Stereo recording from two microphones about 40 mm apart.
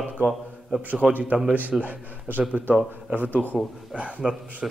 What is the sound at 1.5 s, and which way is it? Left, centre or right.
Speech, right.